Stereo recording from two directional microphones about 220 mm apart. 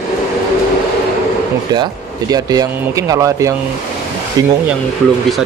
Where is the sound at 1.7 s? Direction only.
20° right (ahead or behind).